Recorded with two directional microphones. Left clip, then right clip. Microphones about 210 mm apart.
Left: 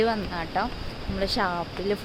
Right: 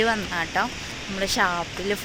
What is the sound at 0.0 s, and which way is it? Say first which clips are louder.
Speech: right 2 dB; centre (ahead or behind).